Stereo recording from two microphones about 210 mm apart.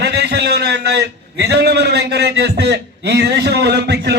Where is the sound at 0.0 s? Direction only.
50° right (ahead or behind).